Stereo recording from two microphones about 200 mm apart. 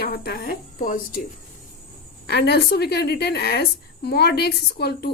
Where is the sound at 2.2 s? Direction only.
55° left (ahead or behind).